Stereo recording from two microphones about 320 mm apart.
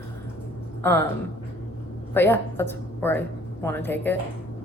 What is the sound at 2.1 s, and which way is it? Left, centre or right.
A woman's voice, centre.